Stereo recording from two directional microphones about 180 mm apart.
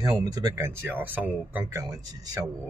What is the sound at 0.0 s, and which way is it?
Speech, 20° right (ahead or behind).